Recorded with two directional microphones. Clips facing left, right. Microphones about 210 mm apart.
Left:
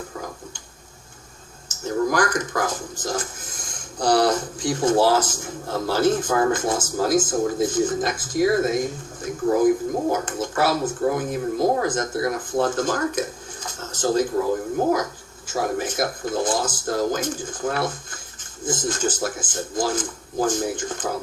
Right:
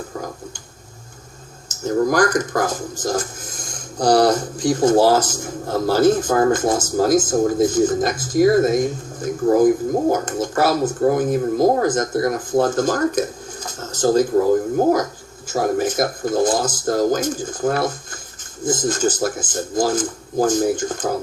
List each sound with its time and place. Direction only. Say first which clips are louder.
1.6 s speech: right 4 dB; 40° right (ahead or behind)